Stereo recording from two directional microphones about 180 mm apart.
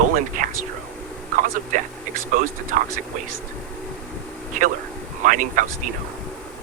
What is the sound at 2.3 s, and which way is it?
Speech, 50° right (ahead or behind).